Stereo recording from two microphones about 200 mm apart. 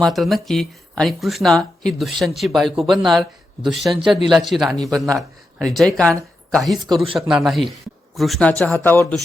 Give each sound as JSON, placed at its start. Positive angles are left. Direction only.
{"t": 0.0, "sound": "speech", "side_deg": 0}
{"t": 6.8, "sound": "speech", "side_deg": -25}
{"t": 7.2, "sound": "speech", "side_deg": 0}